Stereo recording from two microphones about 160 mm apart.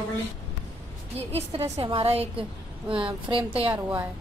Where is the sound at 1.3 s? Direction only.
40° right (ahead or behind).